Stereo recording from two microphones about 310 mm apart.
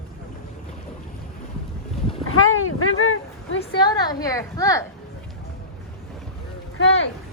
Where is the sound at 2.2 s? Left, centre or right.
Left.